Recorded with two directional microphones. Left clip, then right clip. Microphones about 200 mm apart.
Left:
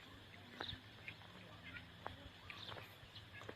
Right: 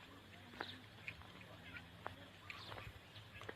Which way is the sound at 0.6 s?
10° right (ahead or behind).